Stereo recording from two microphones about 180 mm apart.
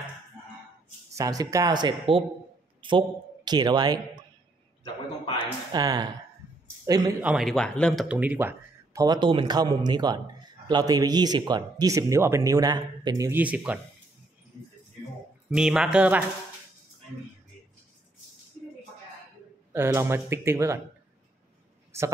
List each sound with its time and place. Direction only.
1.1 s a man's voice: 20° right (ahead or behind)
5.4 s speech: 20° right (ahead or behind)
7.2 s speech: 5° right (ahead or behind)
9.0 s speech: 25° right (ahead or behind); by 13.7 s 5° right (ahead or behind)
15.5 s speech: 5° right (ahead or behind)
19.7 s speech: 15° right (ahead or behind)
21.9 s speech: 15° right (ahead or behind)